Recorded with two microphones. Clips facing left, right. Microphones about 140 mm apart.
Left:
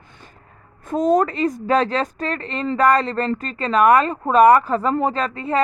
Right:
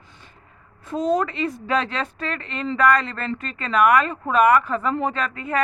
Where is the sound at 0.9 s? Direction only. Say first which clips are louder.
Left 4 dB; 45° left (ahead or behind).